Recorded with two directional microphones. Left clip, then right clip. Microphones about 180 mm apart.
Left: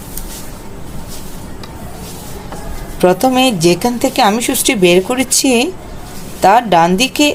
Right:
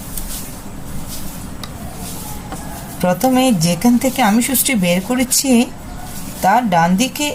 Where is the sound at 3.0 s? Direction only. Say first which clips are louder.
Left 4 dB; 40° left (ahead or behind).